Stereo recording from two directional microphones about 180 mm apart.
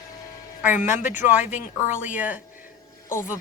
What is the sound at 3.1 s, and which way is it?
Speech, 15° left (ahead or behind).